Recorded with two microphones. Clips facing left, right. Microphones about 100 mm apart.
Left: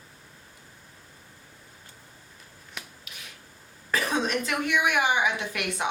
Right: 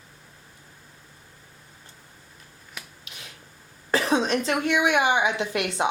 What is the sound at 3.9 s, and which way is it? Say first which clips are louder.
Speech: right 4 dB; 25° right (ahead or behind).